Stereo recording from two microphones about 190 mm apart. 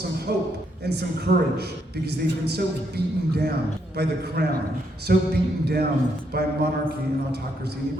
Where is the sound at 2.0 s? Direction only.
60° right (ahead or behind).